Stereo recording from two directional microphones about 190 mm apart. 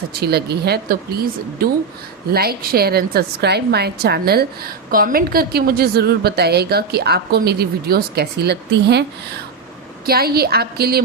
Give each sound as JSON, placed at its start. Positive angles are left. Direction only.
{"t": 0.1, "sound": "a woman's voice", "side_deg": -55}
{"t": 10.1, "sound": "a woman's voice", "side_deg": -55}